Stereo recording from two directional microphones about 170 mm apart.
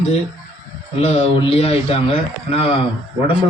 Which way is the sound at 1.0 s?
40° left (ahead or behind).